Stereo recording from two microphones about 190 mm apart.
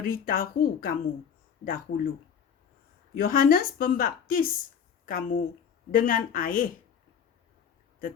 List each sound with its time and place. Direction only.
0.0 s a woman's voice: 50° left (ahead or behind)
3.2 s a woman's voice: 50° left (ahead or behind)